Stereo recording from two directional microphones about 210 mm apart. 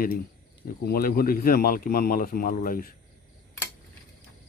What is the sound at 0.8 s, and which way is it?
Speech, 45° left (ahead or behind).